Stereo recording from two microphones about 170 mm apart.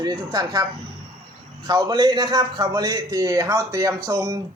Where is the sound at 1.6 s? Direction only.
25° right (ahead or behind).